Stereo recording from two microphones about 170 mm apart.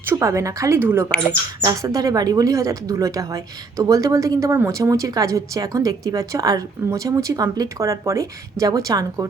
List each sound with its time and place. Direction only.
0.0 s a woman's voice: 15° right (ahead or behind)